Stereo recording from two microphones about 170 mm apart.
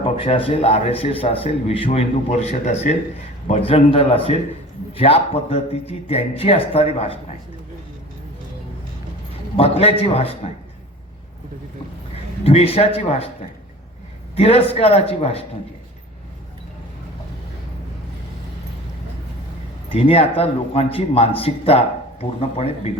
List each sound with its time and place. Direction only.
0.0 s a man's voice: 30° left (ahead or behind)
9.6 s a man's voice: 35° left (ahead or behind)
12.5 s a man's voice: 35° left (ahead or behind)
14.3 s a man's voice: 35° left (ahead or behind)
19.9 s a man's voice: 35° left (ahead or behind)